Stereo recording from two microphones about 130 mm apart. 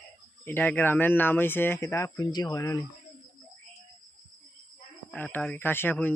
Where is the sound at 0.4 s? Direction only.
15° left (ahead or behind); by 2.8 s 30° left (ahead or behind).